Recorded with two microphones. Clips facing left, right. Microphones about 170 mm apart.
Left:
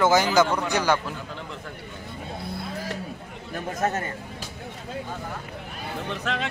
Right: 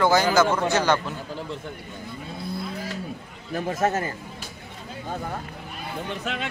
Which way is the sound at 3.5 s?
30° right (ahead or behind).